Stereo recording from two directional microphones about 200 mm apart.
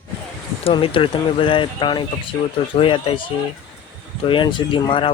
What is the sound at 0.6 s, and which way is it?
Speech, 25° left (ahead or behind).